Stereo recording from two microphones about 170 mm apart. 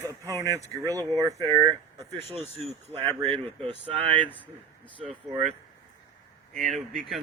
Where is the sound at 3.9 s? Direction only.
35° right (ahead or behind).